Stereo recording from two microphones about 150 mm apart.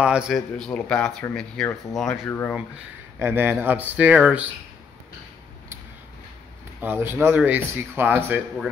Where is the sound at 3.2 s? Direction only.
15° right (ahead or behind).